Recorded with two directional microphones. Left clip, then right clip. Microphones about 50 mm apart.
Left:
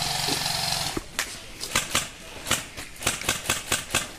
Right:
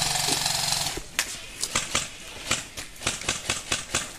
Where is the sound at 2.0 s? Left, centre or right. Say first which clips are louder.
Left 1 dB; left.